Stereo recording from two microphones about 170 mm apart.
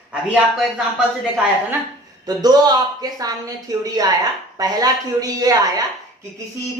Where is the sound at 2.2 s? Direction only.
25° right (ahead or behind).